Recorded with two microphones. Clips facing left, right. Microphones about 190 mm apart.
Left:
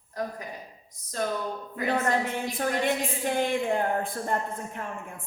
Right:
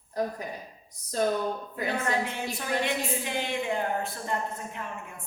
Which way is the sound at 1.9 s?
50° left (ahead or behind).